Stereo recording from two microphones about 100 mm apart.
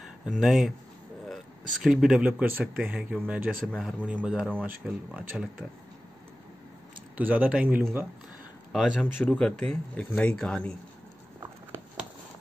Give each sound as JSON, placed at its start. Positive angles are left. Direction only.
{"t": 0.2, "sound": "speech", "side_deg": -5}
{"t": 1.8, "sound": "speech", "side_deg": -5}
{"t": 7.2, "sound": "speech", "side_deg": -15}
{"t": 9.0, "sound": "speech", "side_deg": 10}